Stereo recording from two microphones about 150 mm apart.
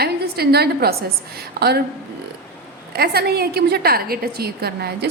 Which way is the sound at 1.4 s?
90° right.